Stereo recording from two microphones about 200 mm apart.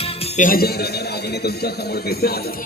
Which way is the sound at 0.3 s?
45° left (ahead or behind).